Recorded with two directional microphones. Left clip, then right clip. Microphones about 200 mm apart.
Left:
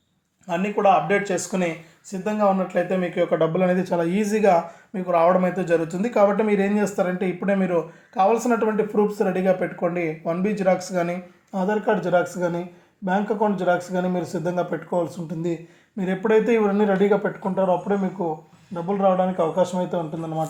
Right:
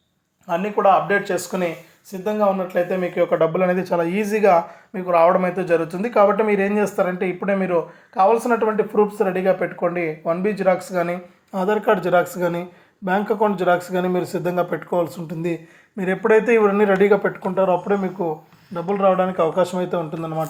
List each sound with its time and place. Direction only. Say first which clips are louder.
0.4 s speech: right 2 dB; centre (ahead or behind)